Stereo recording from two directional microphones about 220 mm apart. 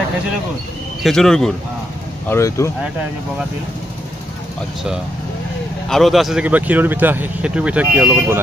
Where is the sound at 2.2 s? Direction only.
10° left (ahead or behind).